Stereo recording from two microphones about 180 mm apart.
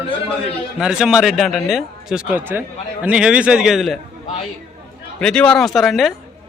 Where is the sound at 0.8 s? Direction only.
5° right (ahead or behind).